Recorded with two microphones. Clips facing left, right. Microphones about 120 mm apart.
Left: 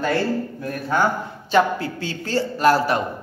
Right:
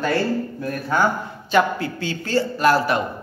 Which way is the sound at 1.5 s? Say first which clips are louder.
Left 1 dB; 35° left (ahead or behind).